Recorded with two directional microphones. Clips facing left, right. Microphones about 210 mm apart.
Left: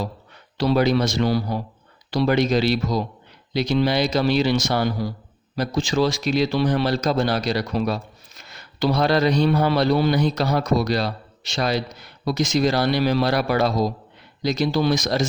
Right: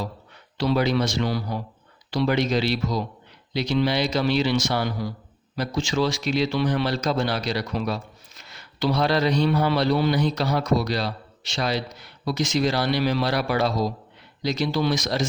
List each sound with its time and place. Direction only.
0.5 s speech: 40° left (ahead or behind)